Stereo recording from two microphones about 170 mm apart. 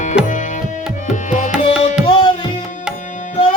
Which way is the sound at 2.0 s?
30° left (ahead or behind).